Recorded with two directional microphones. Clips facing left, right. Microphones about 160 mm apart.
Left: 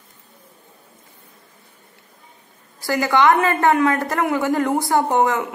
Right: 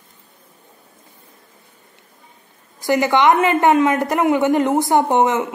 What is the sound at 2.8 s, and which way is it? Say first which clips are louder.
A woman's voice: right 2 dB; 20° right (ahead or behind).